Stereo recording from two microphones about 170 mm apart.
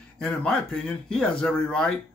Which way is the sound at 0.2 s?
5° left (ahead or behind).